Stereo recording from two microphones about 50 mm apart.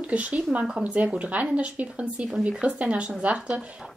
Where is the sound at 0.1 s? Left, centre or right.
Right.